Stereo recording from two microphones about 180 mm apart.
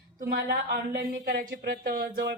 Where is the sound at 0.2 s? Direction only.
50° right (ahead or behind).